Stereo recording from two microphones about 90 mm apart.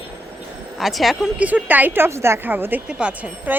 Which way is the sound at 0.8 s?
Centre (ahead or behind).